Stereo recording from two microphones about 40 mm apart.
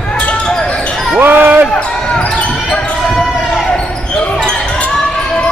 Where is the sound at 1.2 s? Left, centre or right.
Right.